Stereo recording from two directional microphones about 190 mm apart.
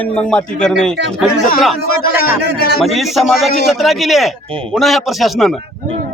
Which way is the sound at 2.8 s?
Centre (ahead or behind).